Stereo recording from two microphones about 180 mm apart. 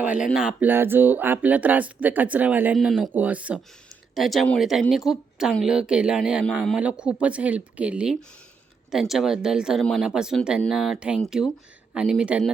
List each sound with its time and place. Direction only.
0.0 s speech: 10° right (ahead or behind)